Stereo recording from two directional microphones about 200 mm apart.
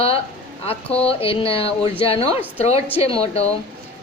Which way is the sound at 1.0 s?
30° left (ahead or behind).